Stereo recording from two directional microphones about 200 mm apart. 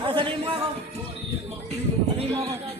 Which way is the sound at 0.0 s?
25° right (ahead or behind).